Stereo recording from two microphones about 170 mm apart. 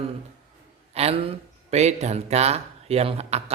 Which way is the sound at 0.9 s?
35° right (ahead or behind).